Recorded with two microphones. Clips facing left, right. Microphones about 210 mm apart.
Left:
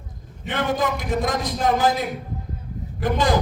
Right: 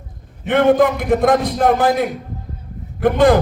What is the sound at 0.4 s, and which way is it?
A man's voice, 60° right (ahead or behind).